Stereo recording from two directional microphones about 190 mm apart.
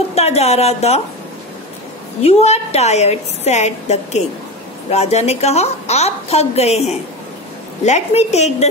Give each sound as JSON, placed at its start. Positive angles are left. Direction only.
{"t": 0.1, "sound": "a woman's voice", "side_deg": 35}
{"t": 2.2, "sound": "a woman's voice", "side_deg": 35}